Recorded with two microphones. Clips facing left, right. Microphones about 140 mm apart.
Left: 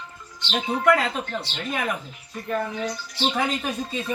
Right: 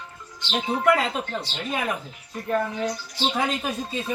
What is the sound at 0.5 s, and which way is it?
Speech, 10° right (ahead or behind).